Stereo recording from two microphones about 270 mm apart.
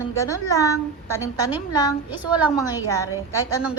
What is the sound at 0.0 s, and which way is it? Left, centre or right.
Speech, centre.